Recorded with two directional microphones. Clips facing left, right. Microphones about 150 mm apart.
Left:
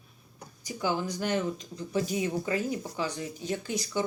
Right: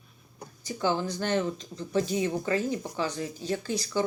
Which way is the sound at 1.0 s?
10° left (ahead or behind).